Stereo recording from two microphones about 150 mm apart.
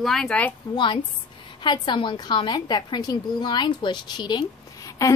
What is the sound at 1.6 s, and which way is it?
Speech, 30° left (ahead or behind).